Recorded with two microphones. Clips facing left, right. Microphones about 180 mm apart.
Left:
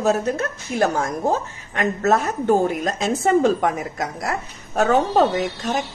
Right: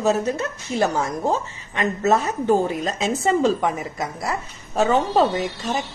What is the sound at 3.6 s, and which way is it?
Speech, centre (ahead or behind).